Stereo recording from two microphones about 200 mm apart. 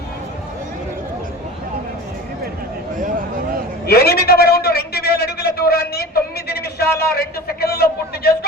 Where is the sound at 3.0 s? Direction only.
40° right (ahead or behind).